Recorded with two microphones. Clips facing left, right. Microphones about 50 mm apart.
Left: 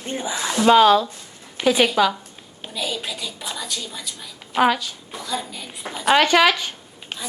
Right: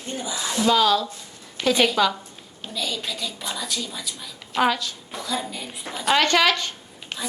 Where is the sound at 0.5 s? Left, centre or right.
Left.